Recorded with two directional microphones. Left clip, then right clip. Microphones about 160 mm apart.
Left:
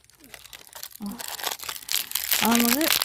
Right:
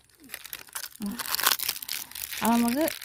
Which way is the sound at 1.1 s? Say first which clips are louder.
Right 6 dB; 45° right (ahead or behind).